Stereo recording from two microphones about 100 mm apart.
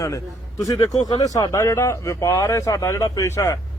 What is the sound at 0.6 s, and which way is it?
Speech, 35° left (ahead or behind).